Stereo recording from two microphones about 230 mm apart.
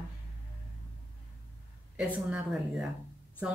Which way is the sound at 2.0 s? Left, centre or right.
Centre.